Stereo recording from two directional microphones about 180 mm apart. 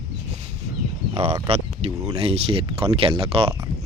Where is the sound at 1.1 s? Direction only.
35° right (ahead or behind).